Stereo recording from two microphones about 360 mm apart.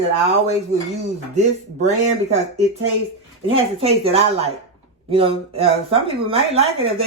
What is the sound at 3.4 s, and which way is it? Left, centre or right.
Speech, centre.